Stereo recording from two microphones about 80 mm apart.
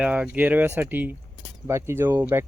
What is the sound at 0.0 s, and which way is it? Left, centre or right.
Speech, centre.